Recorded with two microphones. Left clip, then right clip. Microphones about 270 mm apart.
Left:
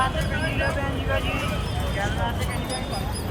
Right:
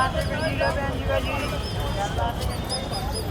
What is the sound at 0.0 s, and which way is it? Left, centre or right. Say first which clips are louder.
Vehicle: right 1 dB; right.